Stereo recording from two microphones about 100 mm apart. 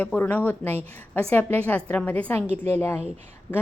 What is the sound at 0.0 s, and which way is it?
A woman's voice, 15° left (ahead or behind).